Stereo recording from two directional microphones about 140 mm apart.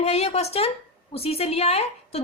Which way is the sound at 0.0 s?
50° left (ahead or behind).